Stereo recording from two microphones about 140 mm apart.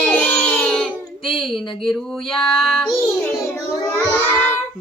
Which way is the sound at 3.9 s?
15° left (ahead or behind).